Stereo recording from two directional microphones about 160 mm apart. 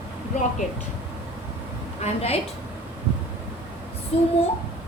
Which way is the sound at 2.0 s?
40° left (ahead or behind).